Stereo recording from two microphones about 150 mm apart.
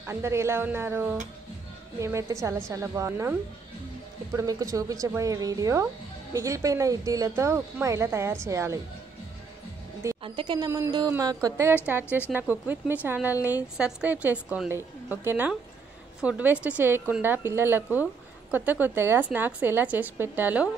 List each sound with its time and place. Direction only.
0.0 s a woman's voice: 20° right (ahead or behind)
4.4 s speech: 25° right (ahead or behind)
10.2 s a woman's voice: 35° right (ahead or behind); by 20.6 s 10° right (ahead or behind)